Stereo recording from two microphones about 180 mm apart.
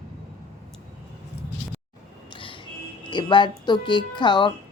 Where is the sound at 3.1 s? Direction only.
25° left (ahead or behind).